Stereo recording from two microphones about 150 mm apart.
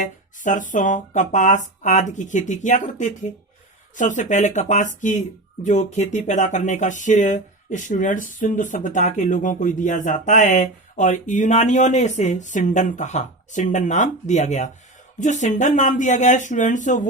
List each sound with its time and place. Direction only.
0.0 s speech: 55° left (ahead or behind)